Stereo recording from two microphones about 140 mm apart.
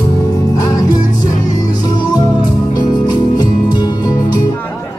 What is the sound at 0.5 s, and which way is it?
Music, 30° left (ahead or behind).